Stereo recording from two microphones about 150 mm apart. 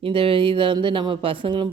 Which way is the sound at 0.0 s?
35° right (ahead or behind).